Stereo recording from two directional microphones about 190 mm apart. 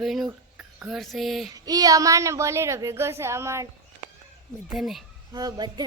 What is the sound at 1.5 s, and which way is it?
A woman's voice, 20° right (ahead or behind).